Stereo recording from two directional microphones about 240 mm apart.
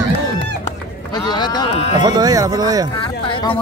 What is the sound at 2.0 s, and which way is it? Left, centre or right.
Speech, centre.